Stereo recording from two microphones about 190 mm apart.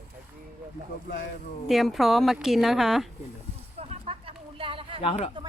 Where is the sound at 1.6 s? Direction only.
Centre (ahead or behind).